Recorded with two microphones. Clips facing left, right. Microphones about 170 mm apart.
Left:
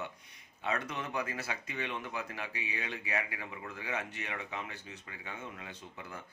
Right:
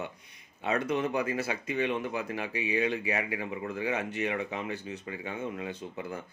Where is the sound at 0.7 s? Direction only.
15° right (ahead or behind).